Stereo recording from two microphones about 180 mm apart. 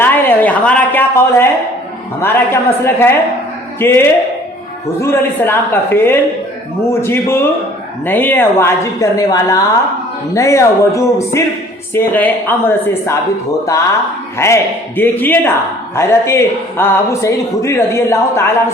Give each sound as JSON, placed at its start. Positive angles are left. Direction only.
{"t": 0.0, "sound": "a sound", "side_deg": 10}
{"t": 2.2, "sound": "speech", "side_deg": 15}
{"t": 14.3, "sound": "speech", "side_deg": 15}